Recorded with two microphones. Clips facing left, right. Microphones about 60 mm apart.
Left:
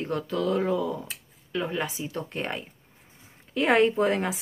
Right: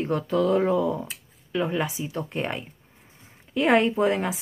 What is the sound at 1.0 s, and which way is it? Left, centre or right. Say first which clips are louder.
A woman's voice: right 1 dB; centre.